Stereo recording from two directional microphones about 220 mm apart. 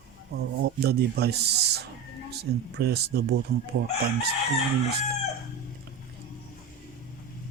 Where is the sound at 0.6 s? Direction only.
45° right (ahead or behind).